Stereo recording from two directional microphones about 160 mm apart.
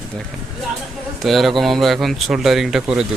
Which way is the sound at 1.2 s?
Centre (ahead or behind).